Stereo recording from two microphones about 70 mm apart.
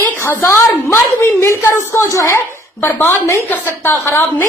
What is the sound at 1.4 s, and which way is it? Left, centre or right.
A woman's voice, left.